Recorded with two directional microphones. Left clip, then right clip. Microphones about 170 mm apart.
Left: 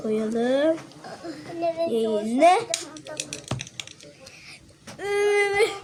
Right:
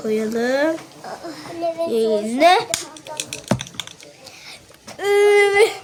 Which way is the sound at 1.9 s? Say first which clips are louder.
Right 5 dB; 25° right (ahead or behind).